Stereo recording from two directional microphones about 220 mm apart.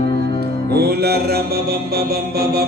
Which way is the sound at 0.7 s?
45° right (ahead or behind).